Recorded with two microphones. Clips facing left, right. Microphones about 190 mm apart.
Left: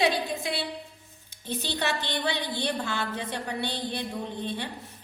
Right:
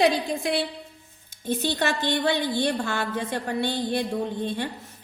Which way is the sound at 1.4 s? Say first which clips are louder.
Right 6 dB; 50° right (ahead or behind).